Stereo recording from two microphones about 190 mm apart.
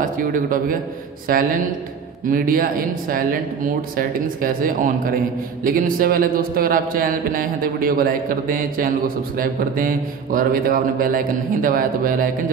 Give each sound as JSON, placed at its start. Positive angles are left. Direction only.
{"t": 0.0, "sound": "a man's voice", "side_deg": -45}